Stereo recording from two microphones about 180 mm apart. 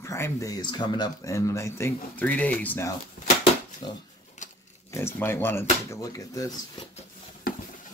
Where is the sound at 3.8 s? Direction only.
25° left (ahead or behind).